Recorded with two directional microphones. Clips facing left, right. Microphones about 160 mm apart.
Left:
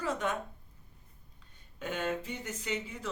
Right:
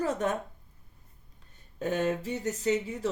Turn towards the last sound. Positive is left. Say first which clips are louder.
# right 9 dB
turn(degrees=-40)  # may be behind; listen again after turning